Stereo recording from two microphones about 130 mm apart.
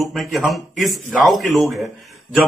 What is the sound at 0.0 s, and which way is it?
A man's voice, centre (ahead or behind).